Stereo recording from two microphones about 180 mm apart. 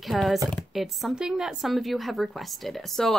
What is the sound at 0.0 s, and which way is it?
Speech, centre (ahead or behind).